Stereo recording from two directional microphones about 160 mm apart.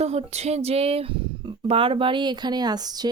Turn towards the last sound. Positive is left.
turn(degrees=-25)  # may be behind; listen again after turning